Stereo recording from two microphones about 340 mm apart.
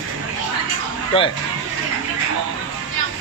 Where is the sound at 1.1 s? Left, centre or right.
Centre.